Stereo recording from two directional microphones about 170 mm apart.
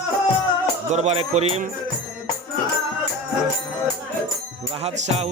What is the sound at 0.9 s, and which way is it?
Speech, 40° right (ahead or behind).